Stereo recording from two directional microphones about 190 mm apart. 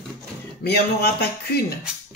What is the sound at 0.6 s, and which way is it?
Speech, 60° left (ahead or behind).